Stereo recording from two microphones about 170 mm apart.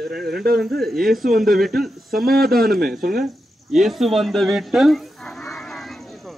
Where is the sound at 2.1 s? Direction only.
60° right (ahead or behind).